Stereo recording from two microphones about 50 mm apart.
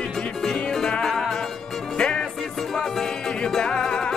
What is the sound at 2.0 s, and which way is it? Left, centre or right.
Music, centre.